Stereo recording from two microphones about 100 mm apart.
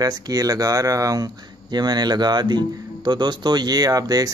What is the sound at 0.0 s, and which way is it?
Speech, 40° right (ahead or behind).